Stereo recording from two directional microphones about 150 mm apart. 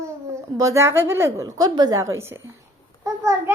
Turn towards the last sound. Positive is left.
turn(degrees=-20)  # may be behind; listen again after turning